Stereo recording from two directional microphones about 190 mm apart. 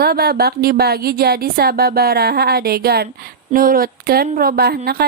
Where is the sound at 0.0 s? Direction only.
55° right (ahead or behind).